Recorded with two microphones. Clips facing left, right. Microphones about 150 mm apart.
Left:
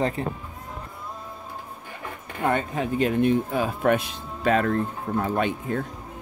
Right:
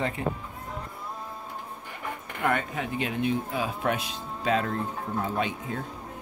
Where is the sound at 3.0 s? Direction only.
50° left (ahead or behind).